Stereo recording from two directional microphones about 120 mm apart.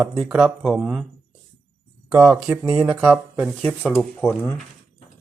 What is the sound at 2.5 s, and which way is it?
Speech, 25° right (ahead or behind).